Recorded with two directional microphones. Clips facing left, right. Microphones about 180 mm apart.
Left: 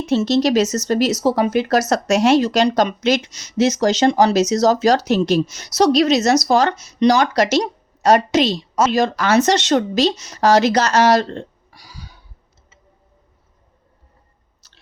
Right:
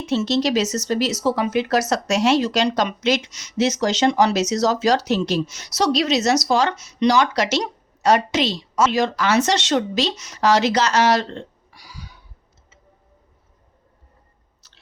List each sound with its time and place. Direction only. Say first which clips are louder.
0.1 s speech: left 4 dB; 45° left (ahead or behind)